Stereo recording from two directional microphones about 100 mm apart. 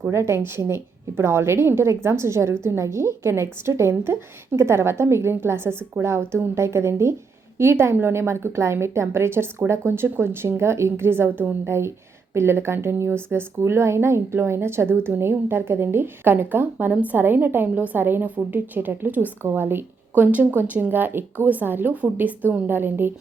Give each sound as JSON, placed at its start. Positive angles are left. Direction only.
{"t": 0.1, "sound": "a woman's voice", "side_deg": -25}